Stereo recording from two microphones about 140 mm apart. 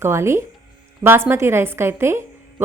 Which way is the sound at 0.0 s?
20° right (ahead or behind).